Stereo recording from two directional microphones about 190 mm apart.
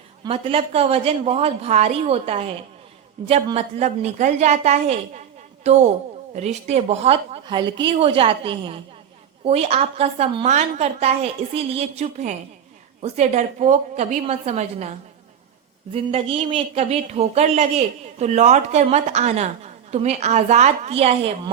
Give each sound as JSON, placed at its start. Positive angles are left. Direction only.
{"t": 0.3, "sound": "speech", "side_deg": -30}
{"t": 6.3, "sound": "a woman's voice", "side_deg": -35}